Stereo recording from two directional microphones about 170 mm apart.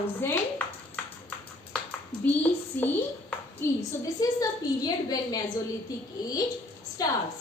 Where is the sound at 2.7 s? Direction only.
10° left (ahead or behind).